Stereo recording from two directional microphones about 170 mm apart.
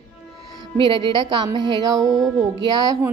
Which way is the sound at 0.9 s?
30° right (ahead or behind).